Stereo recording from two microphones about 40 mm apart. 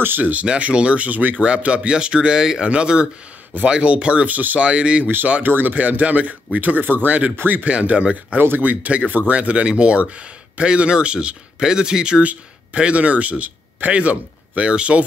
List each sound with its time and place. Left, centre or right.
0.2 s speech: right
1.4 s speech: right
4.3 s speech: right
4.6 s speech: right
5.0 s speech: right
6.8 s speech: right
7.6 s speech: right
8.4 s speech: right
8.6 s speech: right